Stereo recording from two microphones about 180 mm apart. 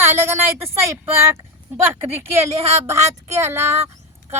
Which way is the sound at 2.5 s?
35° right (ahead or behind).